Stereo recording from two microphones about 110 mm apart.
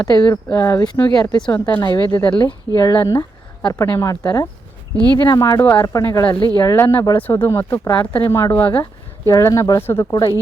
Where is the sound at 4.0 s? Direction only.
30° left (ahead or behind).